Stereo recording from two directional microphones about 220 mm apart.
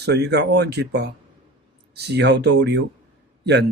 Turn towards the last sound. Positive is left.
turn(degrees=-50)  # may be behind; listen again after turning